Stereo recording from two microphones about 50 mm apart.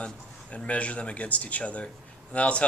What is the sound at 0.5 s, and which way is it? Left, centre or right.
Speech, left.